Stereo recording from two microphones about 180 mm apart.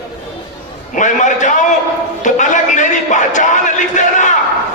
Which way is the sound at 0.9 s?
45° left (ahead or behind).